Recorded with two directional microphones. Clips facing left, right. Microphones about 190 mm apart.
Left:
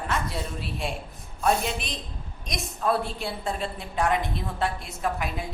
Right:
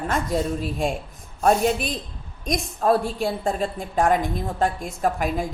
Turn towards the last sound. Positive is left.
turn(degrees=-45)  # may be behind; listen again after turning